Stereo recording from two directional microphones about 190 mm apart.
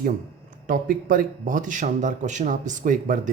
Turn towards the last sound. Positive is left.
turn(degrees=-45)  # may be behind; listen again after turning